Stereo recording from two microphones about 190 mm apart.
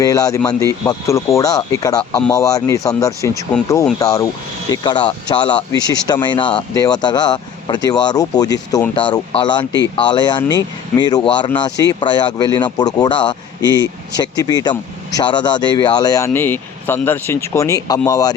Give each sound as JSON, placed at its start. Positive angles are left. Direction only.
{"t": 0.0, "sound": "speech", "side_deg": 20}